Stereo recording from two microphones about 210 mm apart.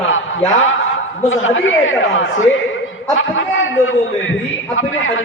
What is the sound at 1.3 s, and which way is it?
A man's voice, 70° left (ahead or behind).